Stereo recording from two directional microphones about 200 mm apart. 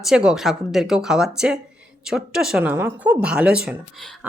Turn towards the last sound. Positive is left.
turn(degrees=0)  # may be behind; listen again after turning